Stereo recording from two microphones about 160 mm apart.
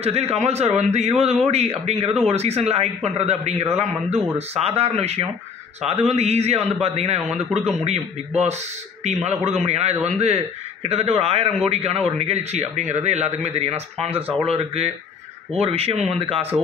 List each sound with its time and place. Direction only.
0.0 s a man's voice: 40° right (ahead or behind)